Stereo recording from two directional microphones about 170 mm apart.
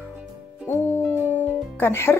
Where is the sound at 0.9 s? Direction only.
10° left (ahead or behind).